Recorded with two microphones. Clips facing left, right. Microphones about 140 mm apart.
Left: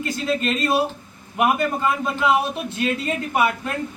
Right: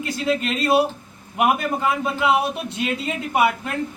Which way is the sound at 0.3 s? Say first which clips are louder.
Right 2 dB; 15° right (ahead or behind).